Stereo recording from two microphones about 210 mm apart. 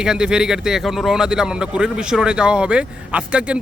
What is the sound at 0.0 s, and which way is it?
Speech, 5° right (ahead or behind).